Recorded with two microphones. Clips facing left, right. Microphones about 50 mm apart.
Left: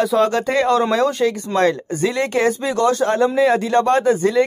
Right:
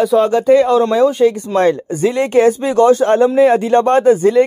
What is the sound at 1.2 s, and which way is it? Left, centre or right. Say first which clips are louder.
Speech: right 5 dB; right.